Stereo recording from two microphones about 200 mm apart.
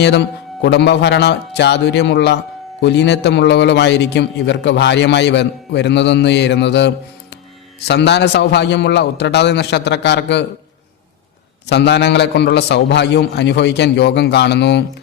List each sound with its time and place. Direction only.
0.0 s a man's voice: 60° left (ahead or behind)
11.6 s a man's voice: 60° left (ahead or behind)